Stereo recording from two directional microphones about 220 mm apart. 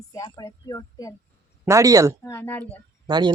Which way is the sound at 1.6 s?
15° right (ahead or behind).